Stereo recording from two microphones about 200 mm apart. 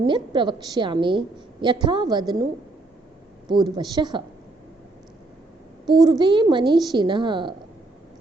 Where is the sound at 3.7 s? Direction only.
20° right (ahead or behind).